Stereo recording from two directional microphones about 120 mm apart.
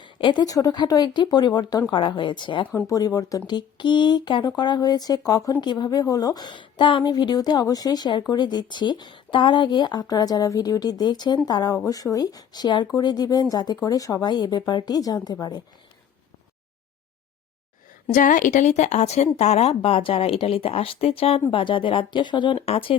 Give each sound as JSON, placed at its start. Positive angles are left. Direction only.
{"t": 0.0, "sound": "speech", "side_deg": 40}
{"t": 2.7, "sound": "speech", "side_deg": 25}
{"t": 18.1, "sound": "a woman's voice", "side_deg": 90}
{"t": 22.6, "sound": "speech", "side_deg": 55}